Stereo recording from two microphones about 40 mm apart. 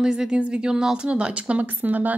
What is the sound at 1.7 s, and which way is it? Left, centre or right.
Speech, right.